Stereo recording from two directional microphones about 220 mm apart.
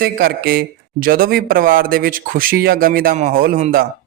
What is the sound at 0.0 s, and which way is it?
Speech, 45° right (ahead or behind).